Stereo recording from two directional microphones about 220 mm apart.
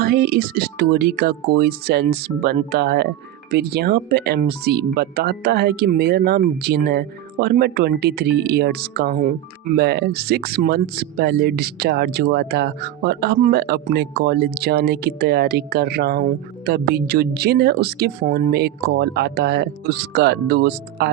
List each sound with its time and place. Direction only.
0.0 s speech: 45° right (ahead or behind)